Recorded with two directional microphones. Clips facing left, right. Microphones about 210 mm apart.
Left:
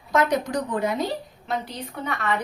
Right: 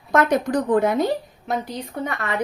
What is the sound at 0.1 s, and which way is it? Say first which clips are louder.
Speech: right 3 dB; 55° right (ahead or behind).